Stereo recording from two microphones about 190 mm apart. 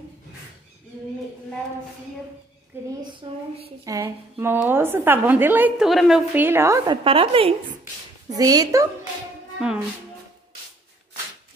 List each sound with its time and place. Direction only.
3.0 s speech: 25° right (ahead or behind)
3.8 s a woman's voice: 15° right (ahead or behind)
6.9 s speech: 30° right (ahead or behind)
8.3 s speech: 20° right (ahead or behind)
9.6 s speech: 5° right (ahead or behind)